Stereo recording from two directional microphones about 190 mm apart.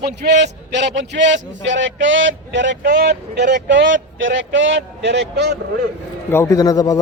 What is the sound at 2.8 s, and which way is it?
A man's voice, 50° right (ahead or behind).